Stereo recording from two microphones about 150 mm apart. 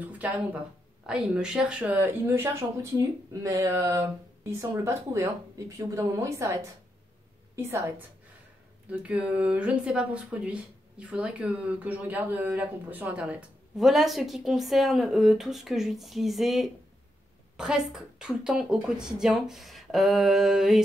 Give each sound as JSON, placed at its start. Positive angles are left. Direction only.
{"t": 0.0, "sound": "a woman's voice", "side_deg": -10}
{"t": 9.0, "sound": "speech", "side_deg": -10}